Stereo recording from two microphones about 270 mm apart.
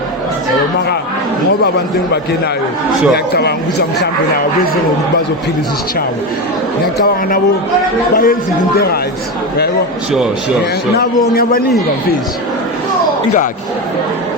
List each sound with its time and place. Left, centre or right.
3.3 s speech: left
7.0 s speech: left